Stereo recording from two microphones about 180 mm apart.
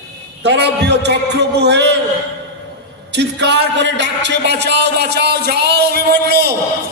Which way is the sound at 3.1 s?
75° right (ahead or behind).